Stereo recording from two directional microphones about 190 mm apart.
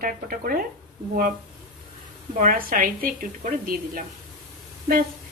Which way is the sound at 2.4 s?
45° right (ahead or behind).